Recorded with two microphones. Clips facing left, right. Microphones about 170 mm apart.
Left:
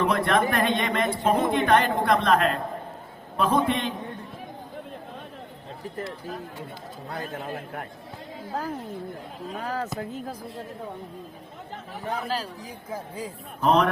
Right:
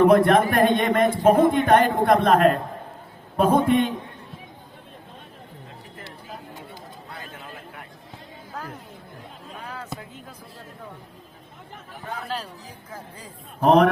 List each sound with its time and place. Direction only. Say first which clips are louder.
0.0 s a man's voice: right 7 dB; 50° right (ahead or behind)
7.1 s a man's voice: left 9 dB; 45° left (ahead or behind)
8.5 s speech: left 5 dB; 30° left (ahead or behind)
9.6 s speech: left 7 dB; 40° left (ahead or behind)
13.6 s a man's voice: right 5 dB; 50° right (ahead or behind)